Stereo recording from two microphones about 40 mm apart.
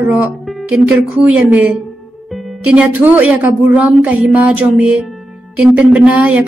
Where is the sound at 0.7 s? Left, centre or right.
Right.